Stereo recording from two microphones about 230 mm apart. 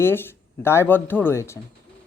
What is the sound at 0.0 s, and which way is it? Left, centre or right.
Speech, centre.